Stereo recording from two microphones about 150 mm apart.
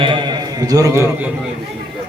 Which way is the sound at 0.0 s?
30° right (ahead or behind).